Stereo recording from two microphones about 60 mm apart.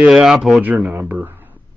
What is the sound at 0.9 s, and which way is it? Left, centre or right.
Speech, right.